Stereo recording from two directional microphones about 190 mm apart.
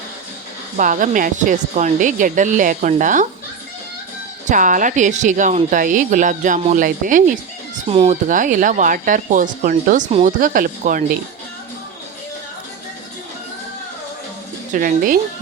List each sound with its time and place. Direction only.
0.8 s speech: 45° right (ahead or behind)
4.4 s speech: 45° right (ahead or behind)
7.9 s speech: 35° right (ahead or behind)
10.4 s speech: 45° right (ahead or behind)
14.7 s speech: 45° right (ahead or behind)